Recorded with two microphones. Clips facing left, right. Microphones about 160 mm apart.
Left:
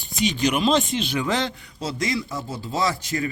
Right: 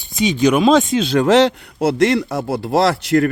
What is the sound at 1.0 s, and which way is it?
A man's voice, 85° right.